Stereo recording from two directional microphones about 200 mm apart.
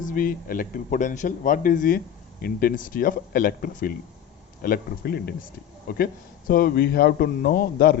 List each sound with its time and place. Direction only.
0.0 s a man's voice: 45° left (ahead or behind)